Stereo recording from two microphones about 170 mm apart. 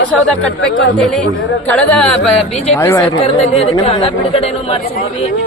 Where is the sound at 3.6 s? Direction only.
35° left (ahead or behind).